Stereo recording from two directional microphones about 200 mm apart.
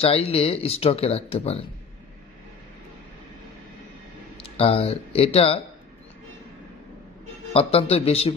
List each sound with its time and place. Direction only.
0.0 s speech: 30° left (ahead or behind)
4.4 s speech: 30° left (ahead or behind)
7.5 s speech: 30° left (ahead or behind)